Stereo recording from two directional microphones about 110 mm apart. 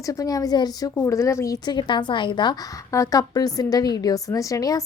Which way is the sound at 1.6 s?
45° left (ahead or behind).